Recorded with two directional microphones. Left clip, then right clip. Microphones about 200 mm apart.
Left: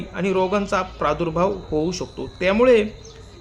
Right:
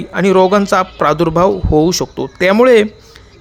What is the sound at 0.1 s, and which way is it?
A man's voice, 45° right (ahead or behind).